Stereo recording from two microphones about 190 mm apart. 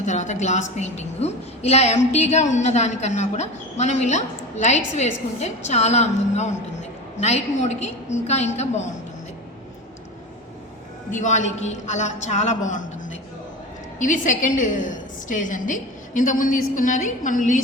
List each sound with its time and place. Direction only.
0.0 s a woman's voice: 40° left (ahead or behind)
11.1 s a woman's voice: 40° left (ahead or behind)
14.0 s a woman's voice: 40° left (ahead or behind)